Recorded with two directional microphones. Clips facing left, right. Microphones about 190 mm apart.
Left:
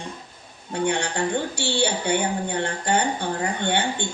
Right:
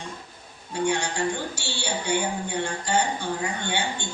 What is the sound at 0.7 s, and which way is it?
Speech, 60° left (ahead or behind).